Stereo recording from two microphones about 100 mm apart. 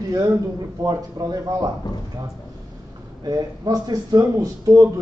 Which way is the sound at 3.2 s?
40° right (ahead or behind).